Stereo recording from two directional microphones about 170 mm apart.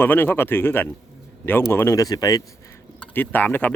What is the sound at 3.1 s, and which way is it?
Speech, 10° left (ahead or behind).